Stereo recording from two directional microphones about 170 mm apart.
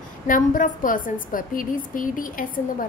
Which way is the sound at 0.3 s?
50° left (ahead or behind).